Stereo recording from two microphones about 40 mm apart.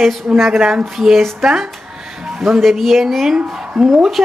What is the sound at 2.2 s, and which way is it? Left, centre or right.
A woman's voice, centre.